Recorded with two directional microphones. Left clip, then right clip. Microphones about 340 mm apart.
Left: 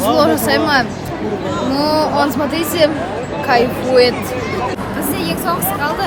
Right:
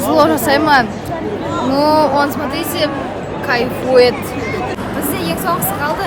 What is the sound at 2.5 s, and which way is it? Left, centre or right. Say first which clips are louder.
Speech: left 7 dB; centre.